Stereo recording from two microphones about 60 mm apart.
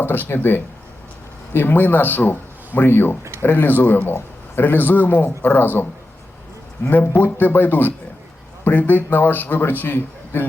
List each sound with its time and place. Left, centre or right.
0.0 s a man's voice: left